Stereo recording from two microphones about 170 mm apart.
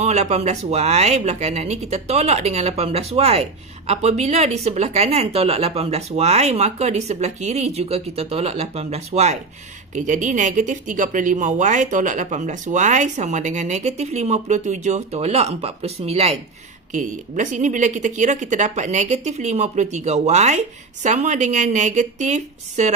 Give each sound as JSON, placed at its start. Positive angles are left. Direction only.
{"t": 0.0, "sound": "speech", "side_deg": -40}
{"t": 16.9, "sound": "speech", "side_deg": -50}